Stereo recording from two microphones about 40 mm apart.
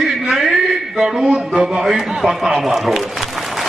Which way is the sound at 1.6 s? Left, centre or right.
Centre.